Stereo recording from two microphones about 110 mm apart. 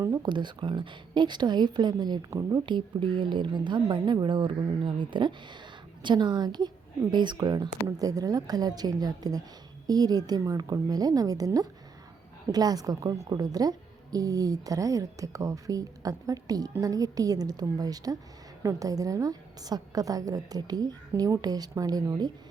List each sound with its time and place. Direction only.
0.0 s a woman's voice: 35° right (ahead or behind)